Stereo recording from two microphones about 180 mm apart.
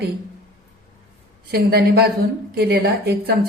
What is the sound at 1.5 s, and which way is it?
A woman's voice, 60° right (ahead or behind).